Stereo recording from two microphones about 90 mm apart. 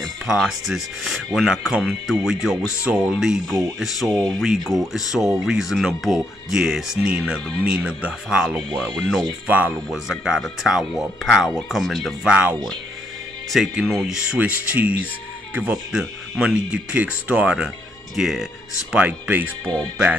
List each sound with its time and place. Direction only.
0.0 s speech: 5° right (ahead or behind)
9.5 s speech: 20° right (ahead or behind)
9.8 s speech: 5° right (ahead or behind)
12.3 s speech: 15° right (ahead or behind)
13.5 s speech: centre (ahead or behind)
18.1 s speech: 5° right (ahead or behind)
19.6 s speech: 10° left (ahead or behind)